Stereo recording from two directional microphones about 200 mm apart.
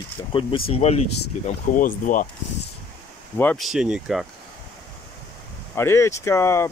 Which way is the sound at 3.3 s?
5° left (ahead or behind).